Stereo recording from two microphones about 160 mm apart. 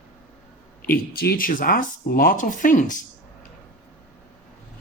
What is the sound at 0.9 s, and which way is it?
Speech, 75° left (ahead or behind).